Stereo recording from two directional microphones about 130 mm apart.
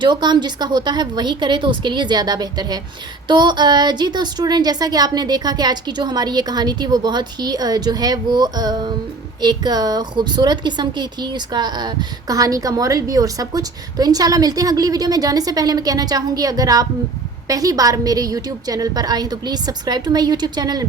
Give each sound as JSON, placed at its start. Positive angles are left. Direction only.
{"t": 0.0, "sound": "a woman's voice", "side_deg": -35}